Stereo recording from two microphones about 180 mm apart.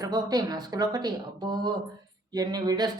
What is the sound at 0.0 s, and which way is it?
Speech, 20° right (ahead or behind).